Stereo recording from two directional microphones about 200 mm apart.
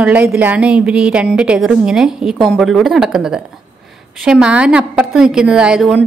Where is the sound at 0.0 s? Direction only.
5° right (ahead or behind).